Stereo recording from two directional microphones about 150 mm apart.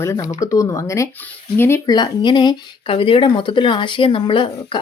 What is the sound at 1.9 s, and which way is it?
Speech, 25° left (ahead or behind).